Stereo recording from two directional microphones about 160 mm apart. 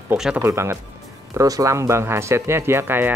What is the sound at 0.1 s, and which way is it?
Speech, 5° right (ahead or behind).